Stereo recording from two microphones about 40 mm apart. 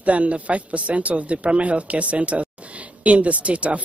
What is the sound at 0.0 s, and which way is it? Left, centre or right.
Speech, right.